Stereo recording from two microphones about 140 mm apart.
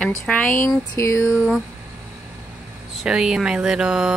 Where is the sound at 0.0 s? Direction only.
10° left (ahead or behind).